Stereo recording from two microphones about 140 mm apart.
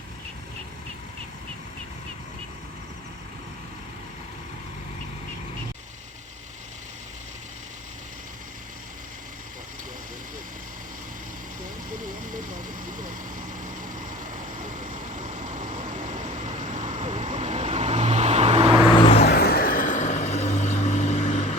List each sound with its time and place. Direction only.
11.9 s vehicle: 70° right (ahead or behind)
13.7 s vehicle: 70° right (ahead or behind); by 18.8 s 50° right (ahead or behind)
18.9 s vehicle: 40° left (ahead or behind)
19.4 s vehicle: 90° left; by 21.5 s 50° left (ahead or behind)